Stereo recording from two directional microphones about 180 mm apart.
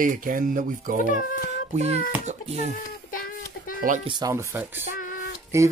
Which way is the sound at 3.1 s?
50° left (ahead or behind).